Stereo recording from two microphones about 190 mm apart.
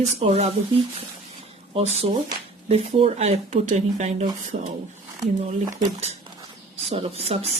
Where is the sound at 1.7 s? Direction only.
30° right (ahead or behind).